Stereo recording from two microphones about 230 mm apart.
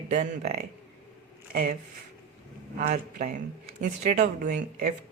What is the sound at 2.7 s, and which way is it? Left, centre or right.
Speech, right.